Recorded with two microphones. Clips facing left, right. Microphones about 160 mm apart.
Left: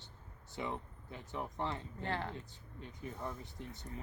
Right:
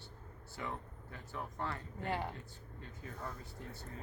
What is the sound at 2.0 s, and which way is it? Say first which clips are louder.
Speech: right 1 dB; 15° right (ahead or behind).